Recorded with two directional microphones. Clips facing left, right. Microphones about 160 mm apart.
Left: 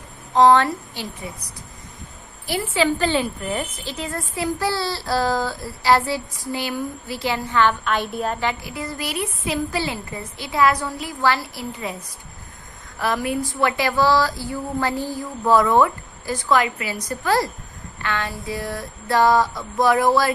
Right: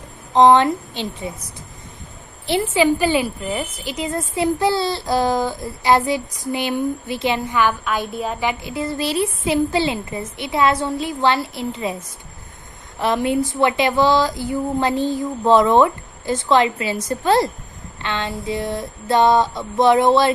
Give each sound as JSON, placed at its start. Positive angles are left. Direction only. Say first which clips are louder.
{"t": 0.3, "sound": "a woman's voice", "louder": "right 2 dB", "side_deg": -20}
{"t": 8.6, "sound": "a woman's voice", "louder": "right 6 dB", "side_deg": -25}
{"t": 13.0, "sound": "a woman's voice", "louder": "right 4 dB", "side_deg": -25}